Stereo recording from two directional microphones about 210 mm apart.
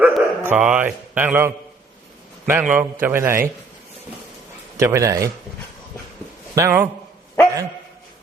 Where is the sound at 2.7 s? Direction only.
10° right (ahead or behind).